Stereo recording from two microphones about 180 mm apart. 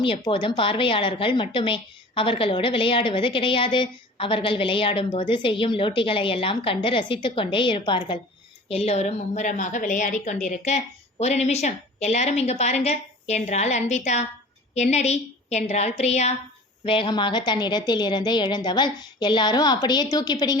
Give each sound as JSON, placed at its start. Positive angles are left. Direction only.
{"t": 0.0, "sound": "a woman's voice", "side_deg": 30}